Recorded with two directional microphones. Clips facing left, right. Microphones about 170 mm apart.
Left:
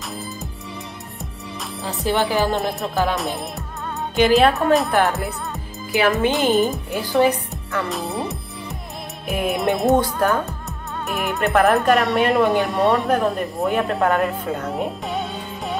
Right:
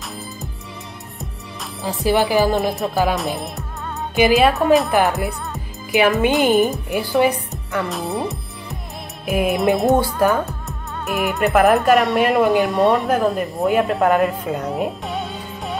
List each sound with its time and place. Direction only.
1.8 s speech: 10° right (ahead or behind)
5.9 s a woman's voice: 15° right (ahead or behind)
7.9 s music: centre (ahead or behind)
9.3 s speech: centre (ahead or behind)